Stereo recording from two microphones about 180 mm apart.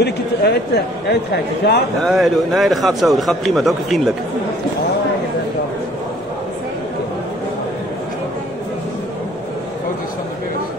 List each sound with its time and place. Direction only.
0.0 s speech: 65° left (ahead or behind)
2.0 s a man's voice: centre (ahead or behind)